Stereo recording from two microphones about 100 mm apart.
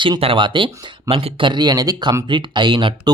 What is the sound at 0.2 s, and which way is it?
Speech, 55° right (ahead or behind).